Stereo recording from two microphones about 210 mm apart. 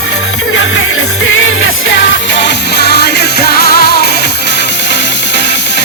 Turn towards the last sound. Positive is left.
turn(degrees=50)  # may be behind; listen again after turning